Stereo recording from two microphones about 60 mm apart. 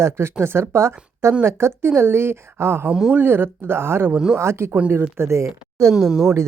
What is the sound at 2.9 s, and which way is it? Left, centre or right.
Speech, centre.